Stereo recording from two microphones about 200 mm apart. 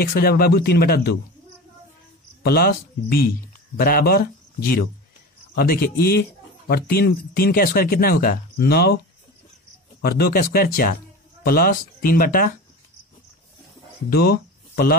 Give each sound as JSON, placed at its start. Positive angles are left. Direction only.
{"t": 0.0, "sound": "speech", "side_deg": 50}
{"t": 2.4, "sound": "speech", "side_deg": 50}
{"t": 10.0, "sound": "speech", "side_deg": 50}
{"t": 14.1, "sound": "speech", "side_deg": 50}